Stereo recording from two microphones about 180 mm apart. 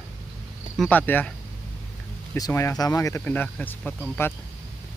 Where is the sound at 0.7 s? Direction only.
10° left (ahead or behind).